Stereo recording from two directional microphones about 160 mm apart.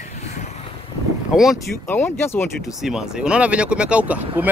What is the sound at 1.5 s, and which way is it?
Speech, 15° left (ahead or behind).